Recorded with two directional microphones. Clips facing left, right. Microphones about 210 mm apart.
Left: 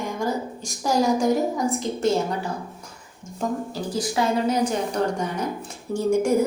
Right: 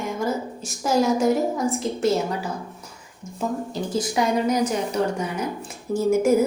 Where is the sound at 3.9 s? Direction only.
20° right (ahead or behind).